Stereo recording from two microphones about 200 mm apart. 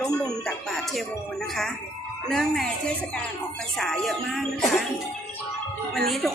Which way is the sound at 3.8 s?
Centre (ahead or behind).